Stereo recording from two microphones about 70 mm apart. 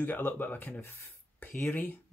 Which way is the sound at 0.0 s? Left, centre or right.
Left.